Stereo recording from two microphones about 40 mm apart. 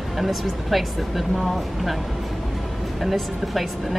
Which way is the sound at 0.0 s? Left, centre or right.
Centre.